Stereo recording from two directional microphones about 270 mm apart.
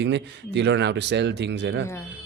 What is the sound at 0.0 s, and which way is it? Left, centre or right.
Speech, right.